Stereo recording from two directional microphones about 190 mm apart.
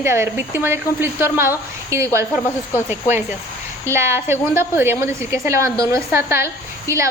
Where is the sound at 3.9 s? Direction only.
15° right (ahead or behind).